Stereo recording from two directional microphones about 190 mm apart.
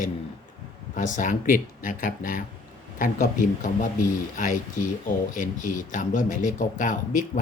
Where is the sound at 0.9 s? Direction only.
40° left (ahead or behind).